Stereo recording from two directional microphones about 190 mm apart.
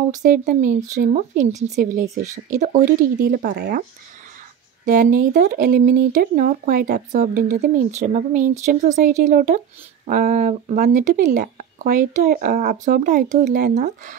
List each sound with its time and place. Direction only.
0.1 s speech: 40° right (ahead or behind)
4.8 s speech: 45° right (ahead or behind)